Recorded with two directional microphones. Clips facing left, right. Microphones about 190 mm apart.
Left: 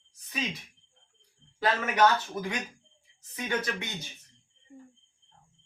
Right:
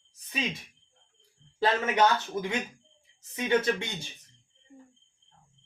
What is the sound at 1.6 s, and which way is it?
Speech, 20° right (ahead or behind).